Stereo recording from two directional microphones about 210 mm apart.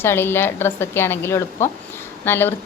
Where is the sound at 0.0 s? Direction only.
10° left (ahead or behind).